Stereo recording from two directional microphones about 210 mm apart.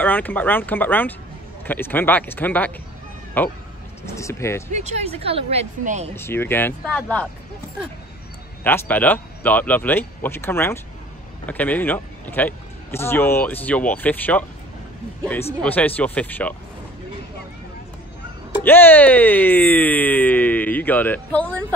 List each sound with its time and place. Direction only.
0.0 s speech: 10° left (ahead or behind)
4.7 s speech: 30° right (ahead or behind)
6.1 s speech: 10° left (ahead or behind)
8.6 s speech: 10° left (ahead or behind)
15.6 s speech: 5° left (ahead or behind)
18.6 s speech: 10° left (ahead or behind)